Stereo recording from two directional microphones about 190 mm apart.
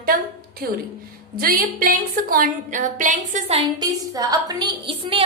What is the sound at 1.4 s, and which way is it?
A woman's voice, 50° right (ahead or behind).